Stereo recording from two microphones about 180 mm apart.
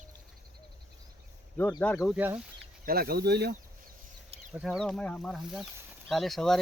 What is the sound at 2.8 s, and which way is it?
Speech, 55° right (ahead or behind).